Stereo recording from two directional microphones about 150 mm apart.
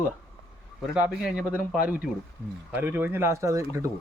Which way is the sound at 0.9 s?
5° right (ahead or behind).